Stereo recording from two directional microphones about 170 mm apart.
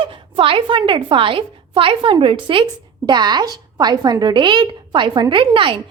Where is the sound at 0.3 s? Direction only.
30° right (ahead or behind).